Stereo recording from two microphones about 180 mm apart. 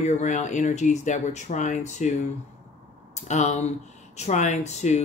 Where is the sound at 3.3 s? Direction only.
40° left (ahead or behind).